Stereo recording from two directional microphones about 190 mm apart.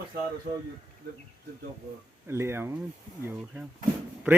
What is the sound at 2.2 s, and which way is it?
Speech, 15° right (ahead or behind).